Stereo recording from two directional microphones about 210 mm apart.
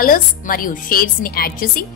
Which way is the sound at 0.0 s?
40° left (ahead or behind).